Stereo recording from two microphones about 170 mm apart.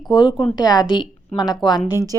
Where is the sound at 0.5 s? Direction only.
25° left (ahead or behind).